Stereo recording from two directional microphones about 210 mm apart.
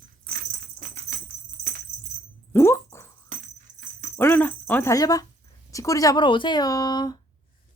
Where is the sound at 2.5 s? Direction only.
10° left (ahead or behind).